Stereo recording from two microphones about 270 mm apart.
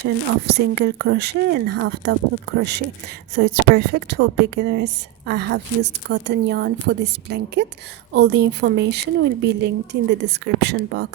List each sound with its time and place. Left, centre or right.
0.4 s a woman's voice: right